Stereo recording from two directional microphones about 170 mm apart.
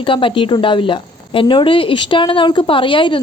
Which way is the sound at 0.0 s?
30° left (ahead or behind).